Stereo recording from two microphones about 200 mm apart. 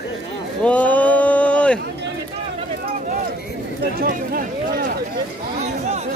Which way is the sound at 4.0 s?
45° right (ahead or behind).